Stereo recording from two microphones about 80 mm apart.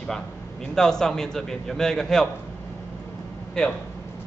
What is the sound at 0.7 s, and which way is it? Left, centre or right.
A man's voice, centre.